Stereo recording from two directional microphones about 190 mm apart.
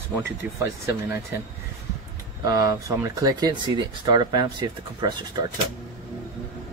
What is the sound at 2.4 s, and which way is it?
Speech, 20° right (ahead or behind).